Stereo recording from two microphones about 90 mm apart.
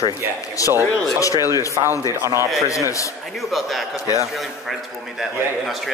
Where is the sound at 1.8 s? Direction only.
70° right (ahead or behind).